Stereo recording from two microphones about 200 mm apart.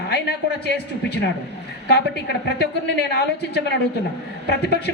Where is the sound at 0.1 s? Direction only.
55° left (ahead or behind).